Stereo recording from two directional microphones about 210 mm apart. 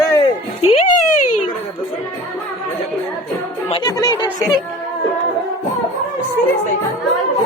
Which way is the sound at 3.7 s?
20° left (ahead or behind).